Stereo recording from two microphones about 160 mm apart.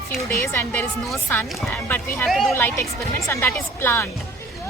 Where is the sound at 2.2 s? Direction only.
Centre (ahead or behind).